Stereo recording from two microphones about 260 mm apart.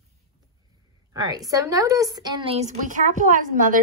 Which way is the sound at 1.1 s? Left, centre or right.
Centre.